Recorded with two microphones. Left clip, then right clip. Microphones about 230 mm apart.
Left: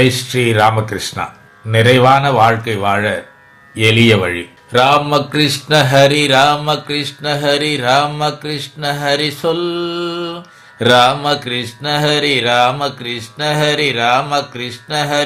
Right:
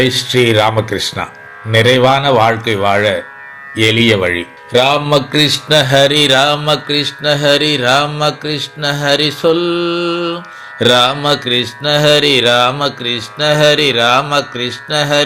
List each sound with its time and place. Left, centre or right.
0.0 s mantra: centre
3.8 s speech: centre
10.8 s mantra: centre